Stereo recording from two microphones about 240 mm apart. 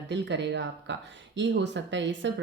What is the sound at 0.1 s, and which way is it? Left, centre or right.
Speech, right.